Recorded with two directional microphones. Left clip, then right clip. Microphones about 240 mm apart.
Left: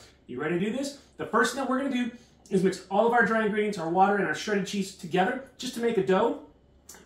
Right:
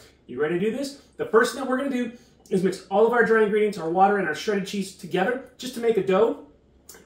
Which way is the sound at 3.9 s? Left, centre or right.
Centre.